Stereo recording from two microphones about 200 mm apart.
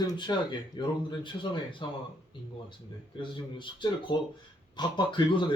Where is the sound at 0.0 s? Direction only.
20° left (ahead or behind).